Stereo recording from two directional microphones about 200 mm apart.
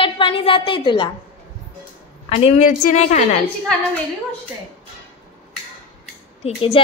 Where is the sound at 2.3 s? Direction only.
30° left (ahead or behind).